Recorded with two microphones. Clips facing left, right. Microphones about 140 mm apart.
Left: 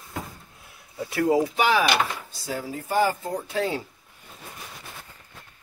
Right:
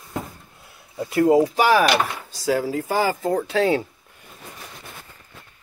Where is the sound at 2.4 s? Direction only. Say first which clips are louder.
Right 11 dB; 90° right.